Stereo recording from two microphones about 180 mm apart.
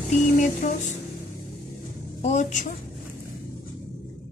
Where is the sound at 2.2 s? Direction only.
40° left (ahead or behind).